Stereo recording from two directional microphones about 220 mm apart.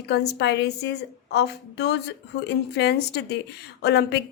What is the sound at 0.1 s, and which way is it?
A woman's voice, 50° left (ahead or behind).